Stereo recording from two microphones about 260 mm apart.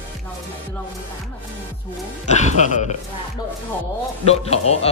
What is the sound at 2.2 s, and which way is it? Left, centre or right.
Speech, left.